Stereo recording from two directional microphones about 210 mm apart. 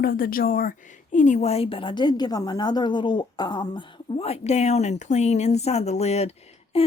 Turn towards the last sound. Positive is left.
turn(degrees=30)  # may be behind; listen again after turning